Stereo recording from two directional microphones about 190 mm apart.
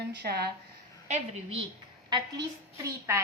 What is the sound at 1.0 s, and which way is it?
Speech, 35° right (ahead or behind).